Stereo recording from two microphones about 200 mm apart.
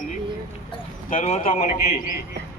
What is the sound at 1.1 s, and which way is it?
A man's voice, 40° left (ahead or behind).